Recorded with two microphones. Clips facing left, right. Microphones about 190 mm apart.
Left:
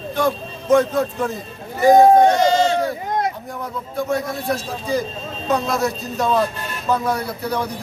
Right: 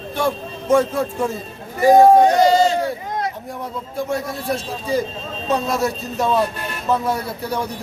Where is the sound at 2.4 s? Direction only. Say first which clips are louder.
Right 2 dB; 35° right (ahead or behind).